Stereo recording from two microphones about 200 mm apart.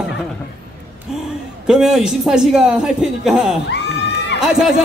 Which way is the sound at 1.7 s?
5° right (ahead or behind).